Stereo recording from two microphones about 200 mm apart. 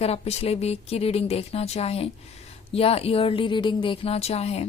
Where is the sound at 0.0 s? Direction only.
30° left (ahead or behind).